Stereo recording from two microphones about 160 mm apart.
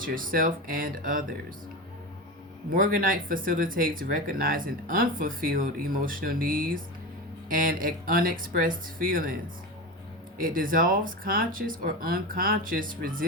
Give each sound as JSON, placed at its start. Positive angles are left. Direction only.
{"t": 0.0, "sound": "speech", "side_deg": -60}
{"t": 2.7, "sound": "speech", "side_deg": -60}
{"t": 10.4, "sound": "speech", "side_deg": -60}